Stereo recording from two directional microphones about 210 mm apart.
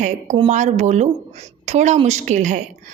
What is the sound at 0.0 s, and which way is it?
A woman's voice, 30° right (ahead or behind).